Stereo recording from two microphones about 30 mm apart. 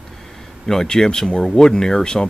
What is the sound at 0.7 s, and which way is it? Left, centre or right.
Speech, centre.